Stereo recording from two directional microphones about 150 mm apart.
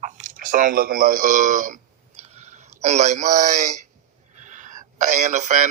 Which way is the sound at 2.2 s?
45° right (ahead or behind).